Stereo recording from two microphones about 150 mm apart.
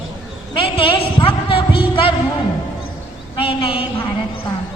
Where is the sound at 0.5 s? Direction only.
35° left (ahead or behind).